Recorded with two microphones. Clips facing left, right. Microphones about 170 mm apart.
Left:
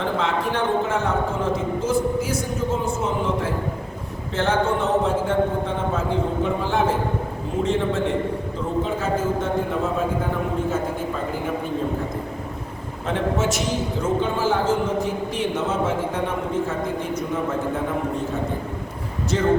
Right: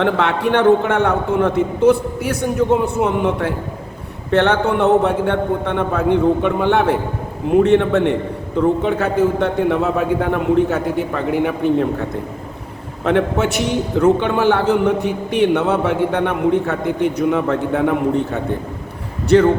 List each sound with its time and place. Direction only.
0.0 s a man's voice: 65° right (ahead or behind)
13.1 s a man's voice: 65° right (ahead or behind)